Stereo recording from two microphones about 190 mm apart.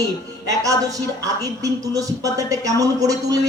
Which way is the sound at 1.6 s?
15° right (ahead or behind).